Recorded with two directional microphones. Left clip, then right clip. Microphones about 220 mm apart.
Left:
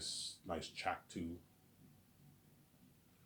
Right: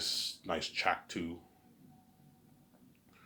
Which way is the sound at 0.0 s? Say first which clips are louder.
Right 10 dB; 25° right (ahead or behind).